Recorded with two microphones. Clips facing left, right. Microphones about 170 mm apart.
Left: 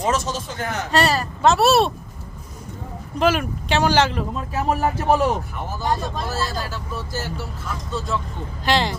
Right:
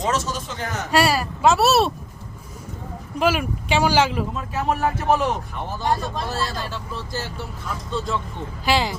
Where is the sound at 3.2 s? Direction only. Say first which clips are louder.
Left 1 dB; 5° right (ahead or behind).